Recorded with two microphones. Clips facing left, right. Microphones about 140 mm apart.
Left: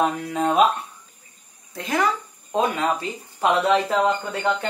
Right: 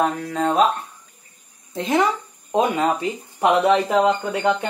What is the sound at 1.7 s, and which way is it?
Speech, 25° right (ahead or behind).